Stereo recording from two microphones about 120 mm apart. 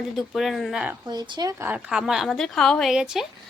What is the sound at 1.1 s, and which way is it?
Speech, 40° right (ahead or behind).